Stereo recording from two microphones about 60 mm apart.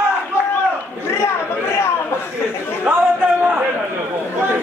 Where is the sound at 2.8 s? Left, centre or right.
Right.